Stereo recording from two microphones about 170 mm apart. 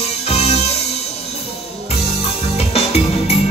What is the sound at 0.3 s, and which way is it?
Music, 35° left (ahead or behind).